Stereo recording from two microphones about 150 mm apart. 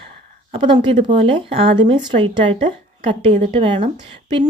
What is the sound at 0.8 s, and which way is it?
A woman's voice, 35° right (ahead or behind).